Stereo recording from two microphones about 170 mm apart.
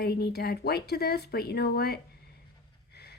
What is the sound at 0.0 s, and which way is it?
Speech, 70° left (ahead or behind).